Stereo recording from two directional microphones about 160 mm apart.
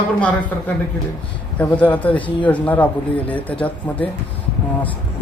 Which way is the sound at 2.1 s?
30° left (ahead or behind).